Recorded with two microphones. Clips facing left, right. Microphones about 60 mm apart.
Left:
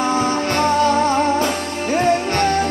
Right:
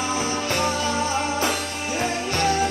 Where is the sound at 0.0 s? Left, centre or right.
Left.